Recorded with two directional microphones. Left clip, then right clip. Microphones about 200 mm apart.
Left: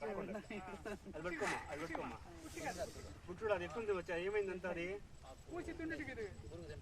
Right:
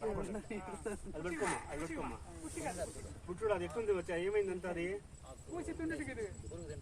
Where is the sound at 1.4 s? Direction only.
25° left (ahead or behind).